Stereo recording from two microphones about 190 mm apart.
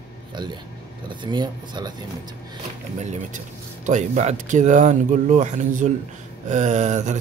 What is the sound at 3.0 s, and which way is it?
Speech, 40° right (ahead or behind).